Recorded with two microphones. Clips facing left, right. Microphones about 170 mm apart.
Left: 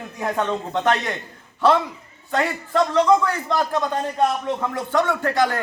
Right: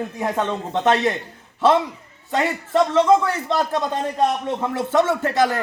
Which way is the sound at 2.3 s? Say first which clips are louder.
Right 2 dB; 20° right (ahead or behind).